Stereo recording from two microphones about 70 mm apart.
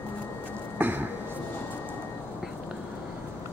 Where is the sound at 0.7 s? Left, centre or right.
Right.